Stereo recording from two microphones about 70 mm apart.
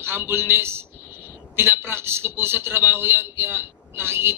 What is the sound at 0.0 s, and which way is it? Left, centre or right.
A man's voice, right.